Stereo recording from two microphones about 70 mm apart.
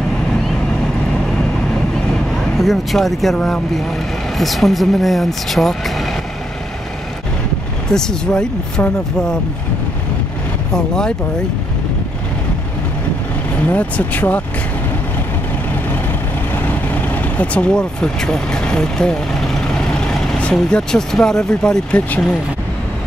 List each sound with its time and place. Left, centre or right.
2.3 s speech: centre
3.3 s speech: centre
4.4 s speech: centre
7.9 s speech: centre
10.7 s speech: centre
13.7 s speech: left
16.6 s vehicle: left; by 20.3 s centre
20.5 s speech: centre